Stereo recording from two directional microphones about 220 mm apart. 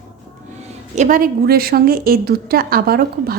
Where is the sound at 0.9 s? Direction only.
35° right (ahead or behind).